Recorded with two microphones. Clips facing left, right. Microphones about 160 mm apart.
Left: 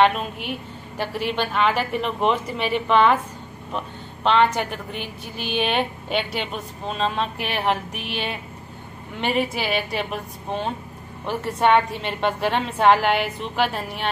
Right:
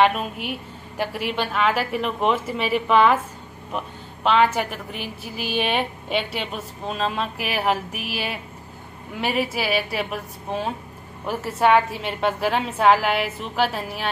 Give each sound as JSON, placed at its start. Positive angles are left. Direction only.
{"t": 0.0, "sound": "a woman's voice", "side_deg": -5}